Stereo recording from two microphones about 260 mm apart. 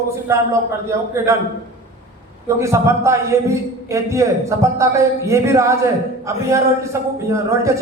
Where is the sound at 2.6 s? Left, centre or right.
Centre.